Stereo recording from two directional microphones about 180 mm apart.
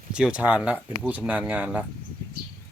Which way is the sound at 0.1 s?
5° right (ahead or behind).